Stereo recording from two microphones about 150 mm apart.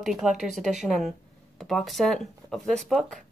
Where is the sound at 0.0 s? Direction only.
5° right (ahead or behind).